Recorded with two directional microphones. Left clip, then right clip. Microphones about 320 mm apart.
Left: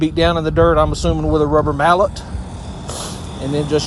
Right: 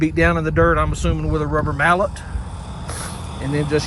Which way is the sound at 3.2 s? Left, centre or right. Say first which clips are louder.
Left 3 dB; left.